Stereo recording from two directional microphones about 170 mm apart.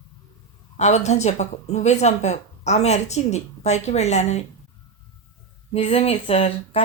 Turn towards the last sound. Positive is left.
turn(degrees=40)  # may be behind; listen again after turning